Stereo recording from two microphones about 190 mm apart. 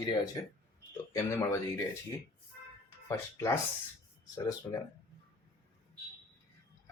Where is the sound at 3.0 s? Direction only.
15° left (ahead or behind).